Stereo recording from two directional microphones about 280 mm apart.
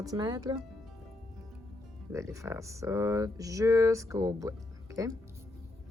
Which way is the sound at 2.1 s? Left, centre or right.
Centre.